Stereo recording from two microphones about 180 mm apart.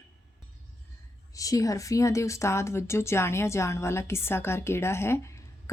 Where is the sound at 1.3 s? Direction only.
20° left (ahead or behind).